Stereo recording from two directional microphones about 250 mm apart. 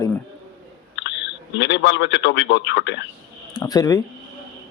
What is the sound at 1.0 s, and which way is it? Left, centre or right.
Speech, left.